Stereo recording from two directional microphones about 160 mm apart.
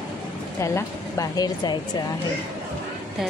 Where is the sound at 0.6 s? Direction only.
20° left (ahead or behind).